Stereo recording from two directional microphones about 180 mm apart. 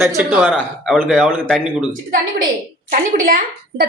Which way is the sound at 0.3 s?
5° right (ahead or behind).